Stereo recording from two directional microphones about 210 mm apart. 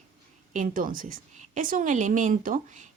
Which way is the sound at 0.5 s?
40° right (ahead or behind).